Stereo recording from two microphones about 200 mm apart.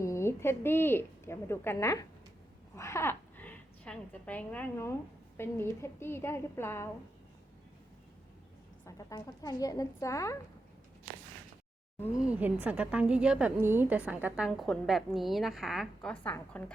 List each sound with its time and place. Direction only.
0.0 s a woman's voice: 15° left (ahead or behind)
8.8 s a woman's voice: 15° left (ahead or behind)
12.1 s a woman's voice: 5° right (ahead or behind)